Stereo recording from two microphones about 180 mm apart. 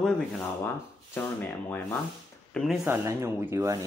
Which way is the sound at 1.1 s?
10° left (ahead or behind).